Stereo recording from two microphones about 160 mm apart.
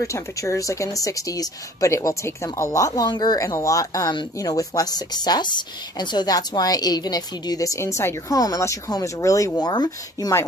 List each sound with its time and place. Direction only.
0.0 s speech: 20° left (ahead or behind)